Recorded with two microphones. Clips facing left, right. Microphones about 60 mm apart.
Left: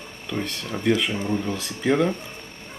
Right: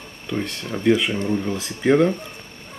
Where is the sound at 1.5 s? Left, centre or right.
Centre.